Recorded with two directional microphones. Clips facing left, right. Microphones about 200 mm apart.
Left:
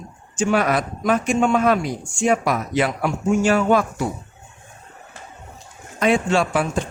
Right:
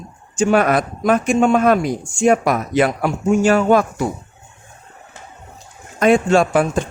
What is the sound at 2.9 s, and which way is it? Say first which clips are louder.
Speech: right 3 dB; 40° right (ahead or behind).